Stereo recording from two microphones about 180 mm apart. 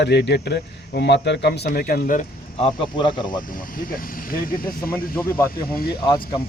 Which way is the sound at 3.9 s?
55° left (ahead or behind).